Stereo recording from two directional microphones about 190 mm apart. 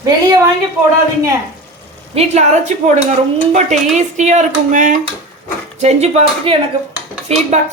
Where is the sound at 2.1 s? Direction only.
35° right (ahead or behind).